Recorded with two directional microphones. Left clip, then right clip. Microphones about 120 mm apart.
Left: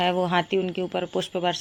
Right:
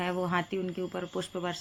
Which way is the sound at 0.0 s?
35° left (ahead or behind).